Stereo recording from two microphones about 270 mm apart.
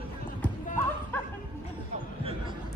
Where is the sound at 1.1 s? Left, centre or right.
Centre.